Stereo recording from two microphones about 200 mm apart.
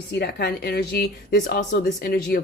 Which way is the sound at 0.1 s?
55° left (ahead or behind).